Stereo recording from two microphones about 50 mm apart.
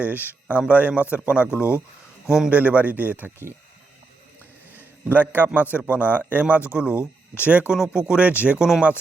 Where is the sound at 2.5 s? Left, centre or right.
Right.